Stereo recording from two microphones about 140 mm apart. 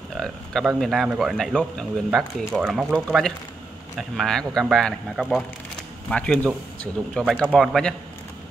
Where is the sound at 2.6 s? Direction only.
5° right (ahead or behind).